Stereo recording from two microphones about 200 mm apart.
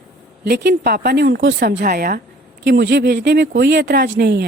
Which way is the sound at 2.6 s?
60° right (ahead or behind).